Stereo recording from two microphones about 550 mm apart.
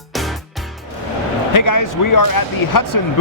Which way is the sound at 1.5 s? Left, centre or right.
Left.